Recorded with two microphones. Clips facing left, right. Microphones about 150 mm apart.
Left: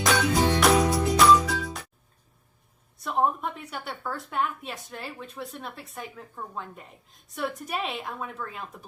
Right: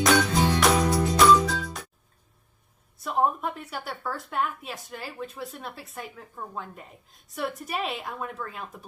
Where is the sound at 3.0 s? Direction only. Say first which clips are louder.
Even; centre (ahead or behind).